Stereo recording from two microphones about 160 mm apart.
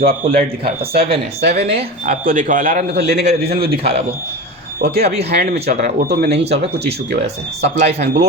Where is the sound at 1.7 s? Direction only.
60° right (ahead or behind); by 3.2 s 90° right.